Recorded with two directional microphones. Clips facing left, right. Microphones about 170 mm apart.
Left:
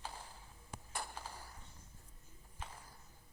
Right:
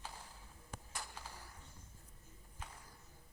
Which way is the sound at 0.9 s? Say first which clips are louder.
Left 6 dB; 55° left (ahead or behind).